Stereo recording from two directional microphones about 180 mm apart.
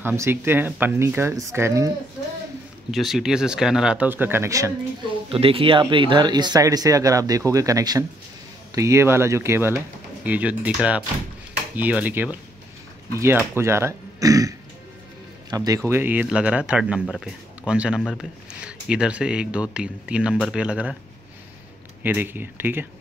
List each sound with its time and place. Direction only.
0.0 s speech: 15° right (ahead or behind)
2.9 s speech: centre (ahead or behind); by 4.7 s 15° right (ahead or behind)
5.3 s speech: 30° right (ahead or behind)
15.5 s speech: 20° right (ahead or behind)
22.0 s speech: 10° right (ahead or behind)